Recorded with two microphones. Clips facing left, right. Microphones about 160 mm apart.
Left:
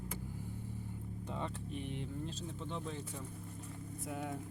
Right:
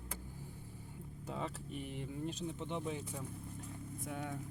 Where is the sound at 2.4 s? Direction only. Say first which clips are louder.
Right 2 dB; 15° right (ahead or behind).